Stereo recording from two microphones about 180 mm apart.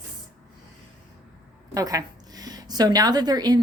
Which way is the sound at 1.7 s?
20° right (ahead or behind).